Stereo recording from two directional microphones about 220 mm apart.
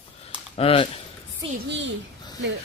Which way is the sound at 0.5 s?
25° left (ahead or behind).